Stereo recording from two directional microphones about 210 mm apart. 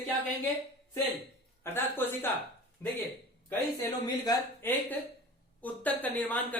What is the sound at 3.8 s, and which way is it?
Speech, 20° left (ahead or behind).